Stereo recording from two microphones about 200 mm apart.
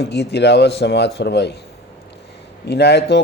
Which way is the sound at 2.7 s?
55° left (ahead or behind).